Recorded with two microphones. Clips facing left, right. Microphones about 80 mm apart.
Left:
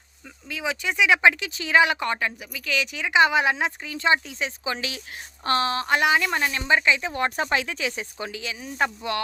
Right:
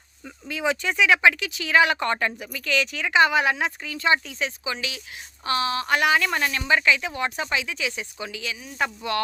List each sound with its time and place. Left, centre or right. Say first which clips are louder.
0.4 s a woman's voice: right 3 dB; centre
2.0 s a woman's voice: right 2 dB; centre; by 4.5 s left
4.6 s speech: left 1 dB; left
7.1 s speech: left 2 dB; left